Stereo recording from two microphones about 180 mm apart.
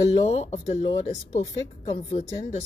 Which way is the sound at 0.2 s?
35° left (ahead or behind).